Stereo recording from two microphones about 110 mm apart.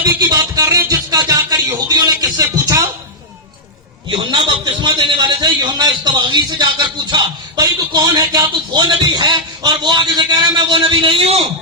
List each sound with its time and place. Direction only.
0.2 s music: 35° right (ahead or behind)
4.1 s a man's voice: 45° right (ahead or behind)